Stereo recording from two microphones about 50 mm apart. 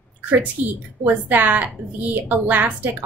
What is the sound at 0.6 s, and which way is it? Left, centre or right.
A woman's voice, right.